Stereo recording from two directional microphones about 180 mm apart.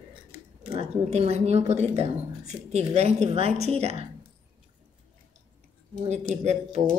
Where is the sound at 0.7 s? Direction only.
35° right (ahead or behind).